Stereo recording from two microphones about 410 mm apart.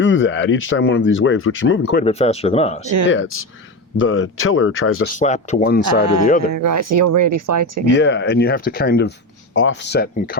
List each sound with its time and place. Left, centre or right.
0.0 s speech: left
2.0 s speech: centre
3.1 s speech: left
5.1 s speech: centre
6.5 s speech: right
7.9 s speech: left